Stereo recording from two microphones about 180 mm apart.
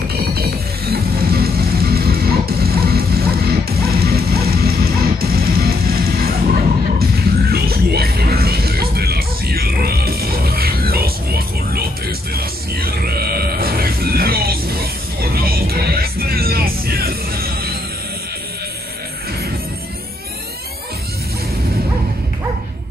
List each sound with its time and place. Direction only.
0.3 s music: 60° right (ahead or behind)